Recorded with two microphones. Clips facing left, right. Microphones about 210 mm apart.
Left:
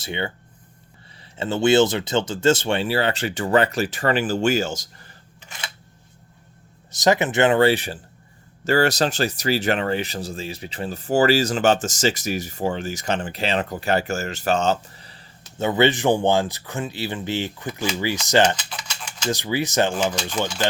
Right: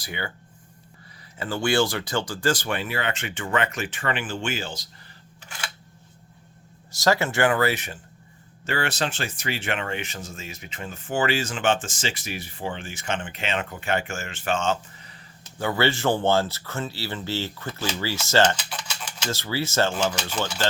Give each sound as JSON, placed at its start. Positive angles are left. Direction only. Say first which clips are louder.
{"t": 0.0, "sound": "speech", "louder": "left 6 dB", "side_deg": 25}
{"t": 1.4, "sound": "speech", "louder": "left 6 dB", "side_deg": 25}
{"t": 6.9, "sound": "speech", "louder": "left 4 dB", "side_deg": 20}